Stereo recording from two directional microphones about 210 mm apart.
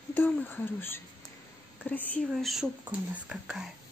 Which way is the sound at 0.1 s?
10° left (ahead or behind).